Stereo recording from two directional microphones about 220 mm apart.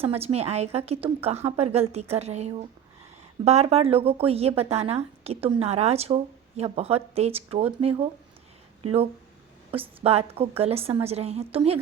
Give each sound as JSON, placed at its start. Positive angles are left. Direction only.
{"t": 0.0, "sound": "speech", "side_deg": -25}
{"t": 9.7, "sound": "speech", "side_deg": -25}